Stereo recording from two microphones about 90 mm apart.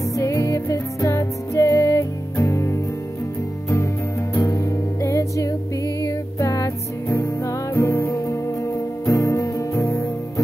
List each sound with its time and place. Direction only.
0.2 s music: 35° left (ahead or behind)
4.3 s music: 30° left (ahead or behind)